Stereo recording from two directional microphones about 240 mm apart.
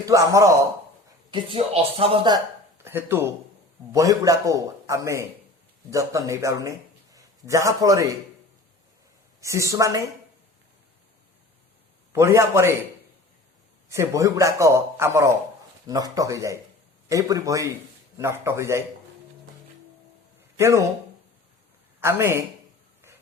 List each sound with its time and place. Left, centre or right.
0.0 s a man's voice: centre
2.8 s a man's voice: centre
9.4 s a man's voice: centre
12.1 s a man's voice: centre
13.9 s a man's voice: centre
20.6 s speech: centre
22.0 s a man's voice: centre